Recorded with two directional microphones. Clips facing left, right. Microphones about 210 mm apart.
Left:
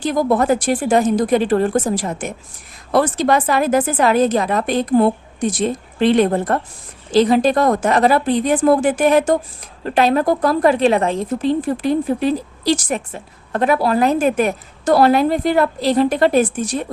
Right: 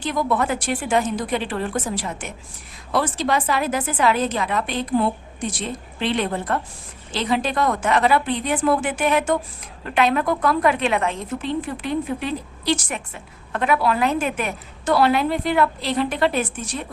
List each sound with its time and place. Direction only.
0.0 s a woman's voice: 40° left (ahead or behind)